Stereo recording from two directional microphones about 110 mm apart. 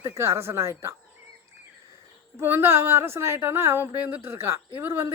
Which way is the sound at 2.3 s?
20° right (ahead or behind).